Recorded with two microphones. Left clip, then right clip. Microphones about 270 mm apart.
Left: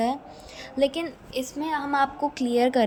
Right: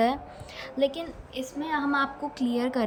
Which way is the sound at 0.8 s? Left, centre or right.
Centre.